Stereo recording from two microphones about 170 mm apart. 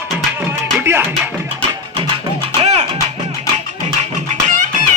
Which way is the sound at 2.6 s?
40° right (ahead or behind).